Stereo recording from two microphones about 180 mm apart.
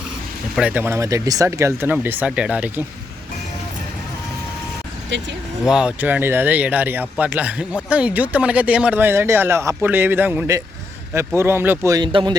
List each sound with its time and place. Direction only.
0.5 s speech: 5° right (ahead or behind)
5.6 s speech: 5° right (ahead or behind); by 12.4 s 25° right (ahead or behind)